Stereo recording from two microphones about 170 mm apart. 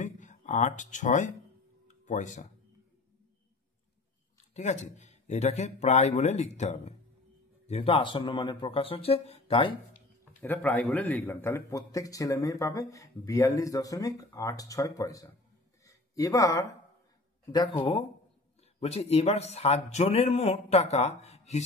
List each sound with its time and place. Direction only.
0.0 s a sound: 45° left (ahead or behind)
4.6 s a man's voice: 40° left (ahead or behind)
10.4 s a man's voice: 10° left (ahead or behind)
15.8 s a sound: 20° left (ahead or behind)
17.5 s a man's voice: 25° left (ahead or behind)
18.8 s a man's voice: 40° left (ahead or behind)